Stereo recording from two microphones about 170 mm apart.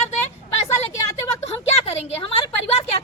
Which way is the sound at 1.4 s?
35° left (ahead or behind).